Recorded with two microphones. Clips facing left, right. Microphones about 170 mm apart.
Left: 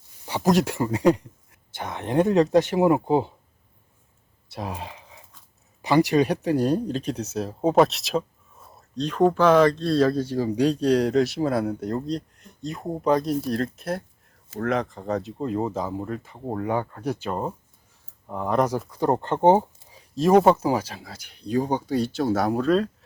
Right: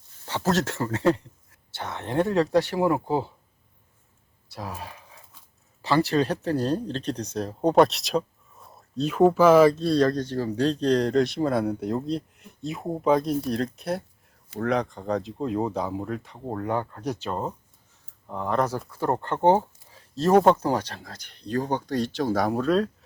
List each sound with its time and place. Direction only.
0.3 s speech: 15° left (ahead or behind)
4.4 s speech: 20° left (ahead or behind); by 22.9 s centre (ahead or behind)